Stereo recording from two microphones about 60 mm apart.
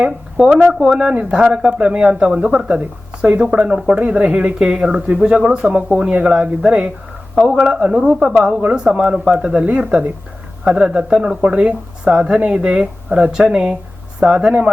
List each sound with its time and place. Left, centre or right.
0.0 s speech: centre
10.6 s speech: centre